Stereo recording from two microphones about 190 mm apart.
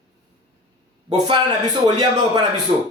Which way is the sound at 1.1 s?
20° right (ahead or behind).